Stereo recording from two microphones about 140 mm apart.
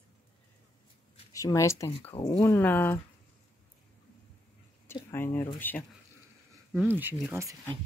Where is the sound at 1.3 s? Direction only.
25° left (ahead or behind).